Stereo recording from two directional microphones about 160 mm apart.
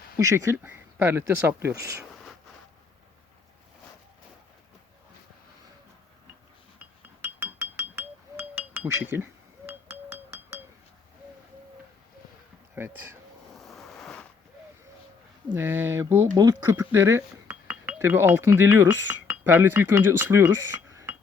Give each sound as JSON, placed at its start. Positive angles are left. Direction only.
{"t": 0.2, "sound": "speech", "side_deg": -20}
{"t": 7.0, "sound": "music", "side_deg": -15}
{"t": 12.7, "sound": "speech", "side_deg": -15}
{"t": 13.6, "sound": "a sound", "side_deg": 0}
{"t": 15.5, "sound": "speech", "side_deg": -15}